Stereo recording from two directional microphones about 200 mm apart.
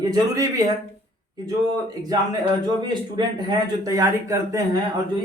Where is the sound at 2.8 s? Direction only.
20° right (ahead or behind).